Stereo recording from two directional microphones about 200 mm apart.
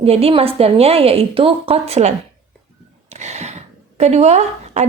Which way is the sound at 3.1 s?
35° right (ahead or behind).